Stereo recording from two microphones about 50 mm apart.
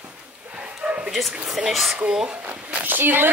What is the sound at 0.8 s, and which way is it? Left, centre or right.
Bow-wow, centre.